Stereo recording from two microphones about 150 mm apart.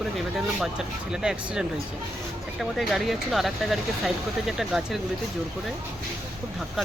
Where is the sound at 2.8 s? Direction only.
Centre (ahead or behind).